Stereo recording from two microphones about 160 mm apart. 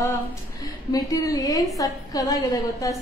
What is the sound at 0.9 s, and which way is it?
A woman's voice, 20° left (ahead or behind).